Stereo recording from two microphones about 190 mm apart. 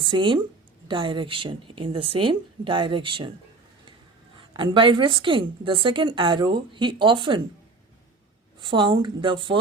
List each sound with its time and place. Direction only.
0.0 s a woman's voice: 25° right (ahead or behind)
4.4 s a woman's voice: 25° right (ahead or behind)
8.6 s a woman's voice: 25° right (ahead or behind)